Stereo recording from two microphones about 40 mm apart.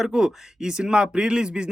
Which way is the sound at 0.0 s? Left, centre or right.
Centre.